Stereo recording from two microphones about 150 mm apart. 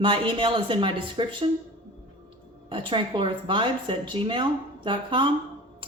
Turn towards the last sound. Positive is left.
turn(degrees=-35)  # may be behind; listen again after turning